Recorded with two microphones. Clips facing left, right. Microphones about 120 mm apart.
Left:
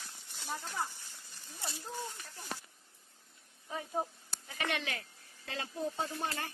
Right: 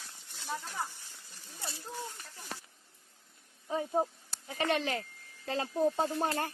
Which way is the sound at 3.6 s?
30° right (ahead or behind).